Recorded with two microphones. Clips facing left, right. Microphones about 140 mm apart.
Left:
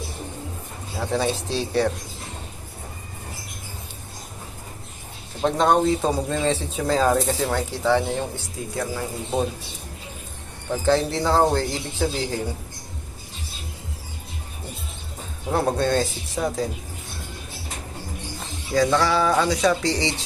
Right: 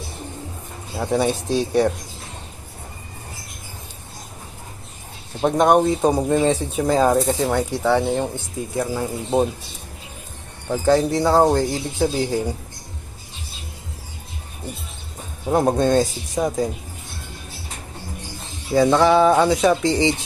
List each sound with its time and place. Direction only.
0.9 s speech: 15° right (ahead or behind)
5.4 s speech: 15° right (ahead or behind)
10.7 s speech: 10° right (ahead or behind)
15.4 s speech: 15° right (ahead or behind)
18.8 s speech: 20° right (ahead or behind)